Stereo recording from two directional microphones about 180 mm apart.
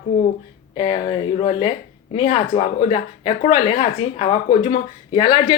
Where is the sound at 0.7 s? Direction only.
30° left (ahead or behind).